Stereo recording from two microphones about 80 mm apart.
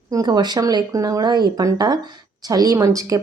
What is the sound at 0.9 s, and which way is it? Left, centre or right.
A woman's voice, right.